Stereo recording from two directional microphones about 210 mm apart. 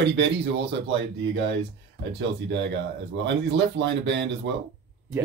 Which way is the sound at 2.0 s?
55° right (ahead or behind).